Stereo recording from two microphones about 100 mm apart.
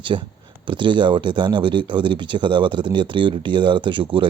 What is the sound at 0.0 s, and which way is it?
Speech, 55° right (ahead or behind).